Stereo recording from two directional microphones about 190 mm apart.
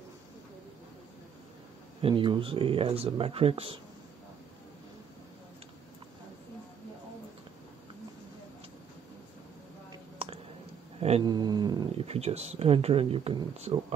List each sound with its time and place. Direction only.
2.0 s speech: 25° right (ahead or behind)
10.2 s a sound: 30° right (ahead or behind)
11.0 s cat: 35° right (ahead or behind)
11.2 s speech: 20° right (ahead or behind)